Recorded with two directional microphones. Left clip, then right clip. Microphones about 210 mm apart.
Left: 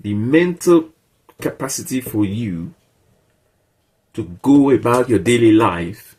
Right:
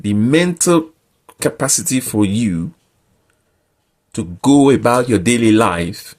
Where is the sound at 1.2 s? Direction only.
50° right (ahead or behind).